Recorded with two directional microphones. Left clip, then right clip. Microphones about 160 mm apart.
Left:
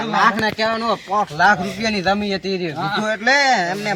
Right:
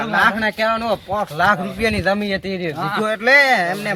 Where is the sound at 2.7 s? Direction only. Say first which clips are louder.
Right 1 dB; 10° left (ahead or behind).